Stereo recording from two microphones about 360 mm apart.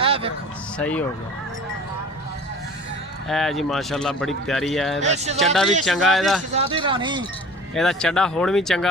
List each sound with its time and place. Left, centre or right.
0.0 s a sound: centre
0.8 s speech: centre
3.2 s speech: centre
4.9 s speech: centre
5.4 s speech: centre
6.5 s speech: centre
7.8 s speech: centre